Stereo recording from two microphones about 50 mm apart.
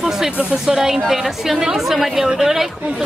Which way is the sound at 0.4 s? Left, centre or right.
Right.